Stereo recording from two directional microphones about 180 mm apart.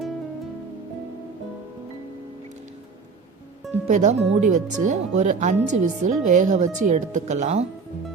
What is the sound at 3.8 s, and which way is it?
Speech, 40° right (ahead or behind).